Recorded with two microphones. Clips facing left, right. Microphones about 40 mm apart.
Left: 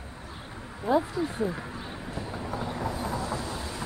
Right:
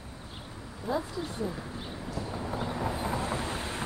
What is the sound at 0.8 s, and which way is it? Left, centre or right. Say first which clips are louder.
Speech: left 7 dB; left.